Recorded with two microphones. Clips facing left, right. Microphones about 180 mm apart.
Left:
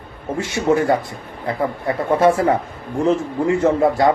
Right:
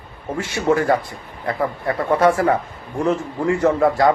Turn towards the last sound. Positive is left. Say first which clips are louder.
# left 1 dB
turn(degrees=25)  # may be behind; listen again after turning